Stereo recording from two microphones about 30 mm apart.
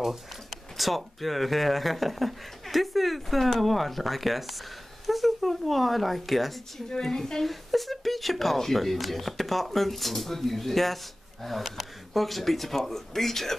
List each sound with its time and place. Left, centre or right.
0.7 s speech: centre
6.9 s a woman's voice: centre
7.4 s speech: centre